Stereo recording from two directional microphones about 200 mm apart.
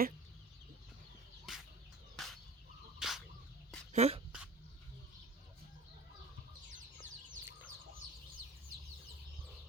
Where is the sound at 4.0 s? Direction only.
30° right (ahead or behind).